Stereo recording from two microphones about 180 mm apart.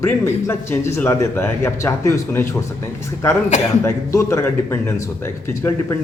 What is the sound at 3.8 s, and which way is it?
A man's voice, 15° left (ahead or behind).